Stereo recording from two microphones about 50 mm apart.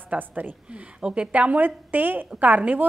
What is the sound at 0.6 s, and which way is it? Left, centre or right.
A woman's voice, right.